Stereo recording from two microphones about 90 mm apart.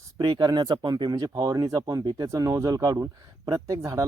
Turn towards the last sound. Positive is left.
turn(degrees=-35)  # may be behind; listen again after turning